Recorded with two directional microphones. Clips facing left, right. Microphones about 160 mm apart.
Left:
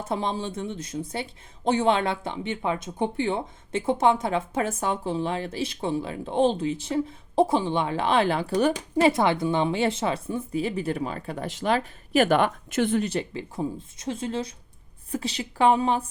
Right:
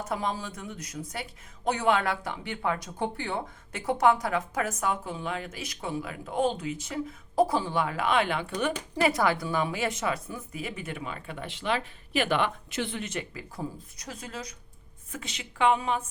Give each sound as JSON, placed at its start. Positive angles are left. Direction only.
{"t": 0.0, "sound": "a woman's voice", "side_deg": 25}